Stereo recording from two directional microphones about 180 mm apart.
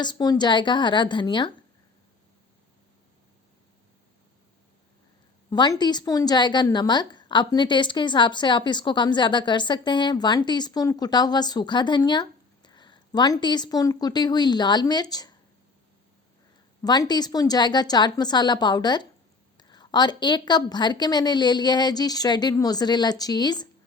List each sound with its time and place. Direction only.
0.0 s a woman's voice: 25° left (ahead or behind)
5.5 s a woman's voice: 25° left (ahead or behind)
16.8 s a woman's voice: 20° left (ahead or behind)